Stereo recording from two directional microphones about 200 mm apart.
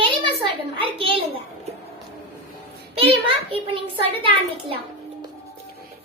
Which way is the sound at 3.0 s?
25° right (ahead or behind).